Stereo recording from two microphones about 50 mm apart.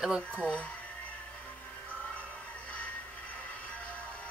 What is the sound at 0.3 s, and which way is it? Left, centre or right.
Speech, left.